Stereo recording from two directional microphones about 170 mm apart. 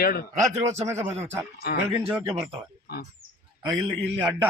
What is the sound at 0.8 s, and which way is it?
Speech, 15° right (ahead or behind).